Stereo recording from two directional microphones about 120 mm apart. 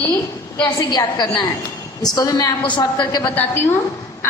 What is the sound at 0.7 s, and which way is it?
A woman's voice, 35° left (ahead or behind).